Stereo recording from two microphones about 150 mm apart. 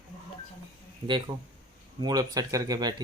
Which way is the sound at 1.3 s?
35° right (ahead or behind).